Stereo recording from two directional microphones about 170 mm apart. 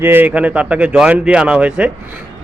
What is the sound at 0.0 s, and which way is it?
A man's voice, 10° right (ahead or behind).